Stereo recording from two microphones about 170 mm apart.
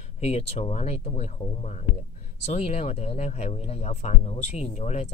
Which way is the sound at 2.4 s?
40° left (ahead or behind).